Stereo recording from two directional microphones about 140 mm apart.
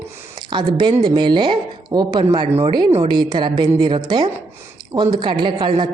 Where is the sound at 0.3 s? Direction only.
35° right (ahead or behind).